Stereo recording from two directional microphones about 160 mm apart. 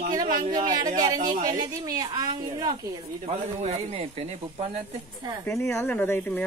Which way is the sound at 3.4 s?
45° right (ahead or behind).